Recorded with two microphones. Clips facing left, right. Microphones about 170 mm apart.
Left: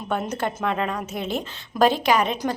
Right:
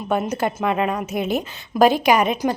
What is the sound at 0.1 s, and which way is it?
A woman's voice, 10° right (ahead or behind).